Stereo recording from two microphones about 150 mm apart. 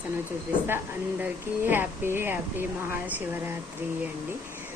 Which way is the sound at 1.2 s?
15° right (ahead or behind).